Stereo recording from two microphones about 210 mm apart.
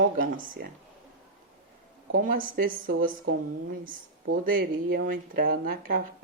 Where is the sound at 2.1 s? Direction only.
40° right (ahead or behind).